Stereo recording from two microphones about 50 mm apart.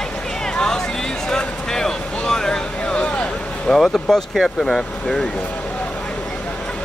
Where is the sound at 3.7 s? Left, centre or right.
Centre.